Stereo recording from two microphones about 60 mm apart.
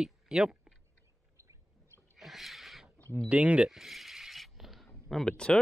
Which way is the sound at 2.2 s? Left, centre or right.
Centre.